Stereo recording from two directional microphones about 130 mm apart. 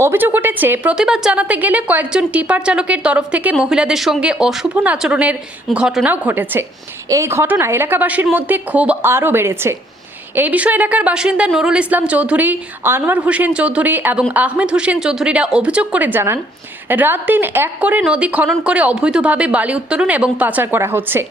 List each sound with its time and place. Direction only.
0.0 s a woman's voice: 15° right (ahead or behind)
6.1 s a woman's voice: 15° right (ahead or behind)